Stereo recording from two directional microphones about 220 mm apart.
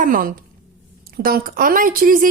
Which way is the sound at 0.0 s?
40° right (ahead or behind).